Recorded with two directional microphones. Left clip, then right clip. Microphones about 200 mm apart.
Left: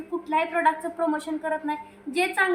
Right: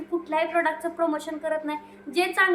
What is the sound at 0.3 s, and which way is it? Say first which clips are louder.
A woman's voice: left 2 dB; 5° right (ahead or behind).